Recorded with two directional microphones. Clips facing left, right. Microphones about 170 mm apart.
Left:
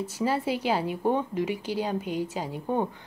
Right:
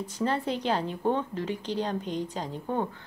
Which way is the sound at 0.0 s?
5° left (ahead or behind).